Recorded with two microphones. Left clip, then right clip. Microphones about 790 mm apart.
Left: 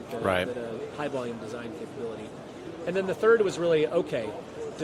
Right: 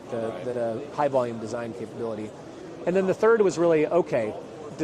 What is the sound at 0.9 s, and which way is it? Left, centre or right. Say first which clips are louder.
Speech: right 10 dB; right.